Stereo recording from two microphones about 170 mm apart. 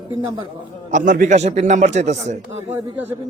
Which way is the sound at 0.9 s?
50° right (ahead or behind).